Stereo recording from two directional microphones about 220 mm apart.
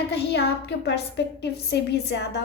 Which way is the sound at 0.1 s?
50° left (ahead or behind).